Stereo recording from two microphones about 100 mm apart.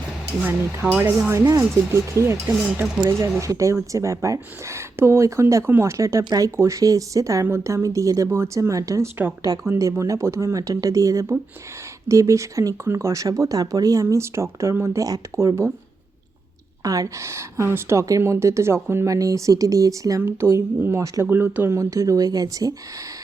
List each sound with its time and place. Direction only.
0.4 s speech: 20° right (ahead or behind)
1.3 s speech: 35° right (ahead or behind)
16.8 s speech: 35° right (ahead or behind)